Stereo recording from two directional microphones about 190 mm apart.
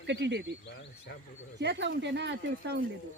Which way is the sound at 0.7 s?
65° left (ahead or behind).